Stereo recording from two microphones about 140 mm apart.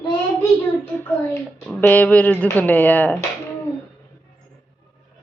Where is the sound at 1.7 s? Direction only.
15° left (ahead or behind).